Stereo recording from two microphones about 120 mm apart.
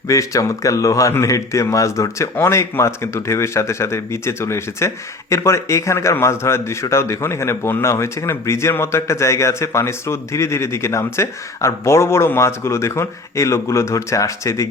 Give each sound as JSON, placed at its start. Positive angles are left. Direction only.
{"t": 0.1, "sound": "speech", "side_deg": 25}